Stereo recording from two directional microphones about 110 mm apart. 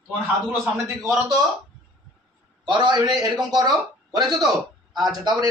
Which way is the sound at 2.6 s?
45° right (ahead or behind).